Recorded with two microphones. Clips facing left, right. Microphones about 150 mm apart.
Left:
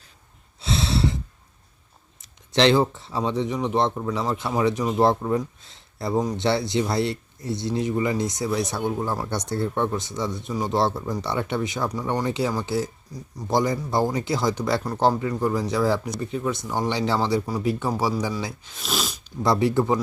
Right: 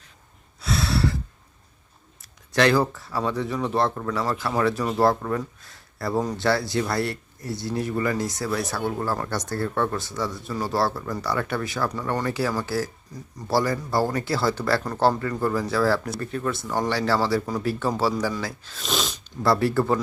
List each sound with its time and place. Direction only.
0.6 s a sound: 25° left (ahead or behind)
2.2 s speech: 20° left (ahead or behind)
9.3 s speech: 20° left (ahead or behind)
18.8 s sneeze: 5° left (ahead or behind)
19.4 s speech: 20° left (ahead or behind)